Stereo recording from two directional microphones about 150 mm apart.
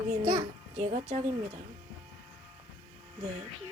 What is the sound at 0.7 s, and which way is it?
Speech, 50° right (ahead or behind).